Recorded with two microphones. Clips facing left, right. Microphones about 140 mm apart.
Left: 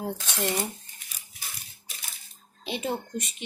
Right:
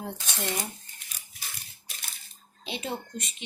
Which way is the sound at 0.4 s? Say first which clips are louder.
Left 4 dB; 10° left (ahead or behind).